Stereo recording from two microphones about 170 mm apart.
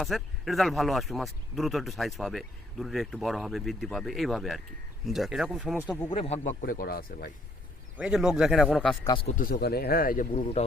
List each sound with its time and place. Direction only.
0.0 s speech: centre (ahead or behind)
6.1 s speech: 40° left (ahead or behind)
6.6 s speech: 55° left (ahead or behind)
7.9 s speech: 5° right (ahead or behind)
9.2 s speech: 55° left (ahead or behind)
10.3 s speech: 40° left (ahead or behind)